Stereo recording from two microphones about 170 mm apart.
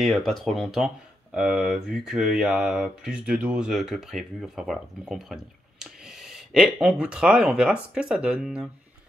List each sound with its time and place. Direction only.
0.0 s speech: centre (ahead or behind)